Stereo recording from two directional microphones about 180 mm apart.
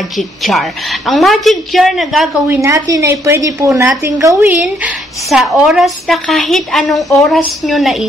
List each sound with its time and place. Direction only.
0.4 s a woman's voice: centre (ahead or behind)
2.4 s a woman's voice: 15° right (ahead or behind)
5.3 s a woman's voice: centre (ahead or behind)